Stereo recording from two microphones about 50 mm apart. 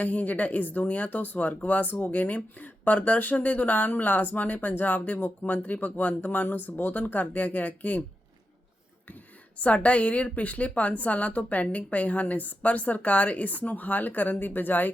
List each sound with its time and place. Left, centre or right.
0.0 s speech: left
9.6 s a woman's voice: left